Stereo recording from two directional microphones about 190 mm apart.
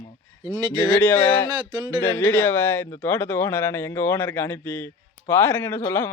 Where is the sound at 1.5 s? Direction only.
25° right (ahead or behind).